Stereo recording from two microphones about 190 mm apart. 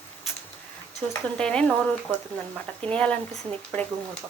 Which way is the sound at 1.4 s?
5° left (ahead or behind).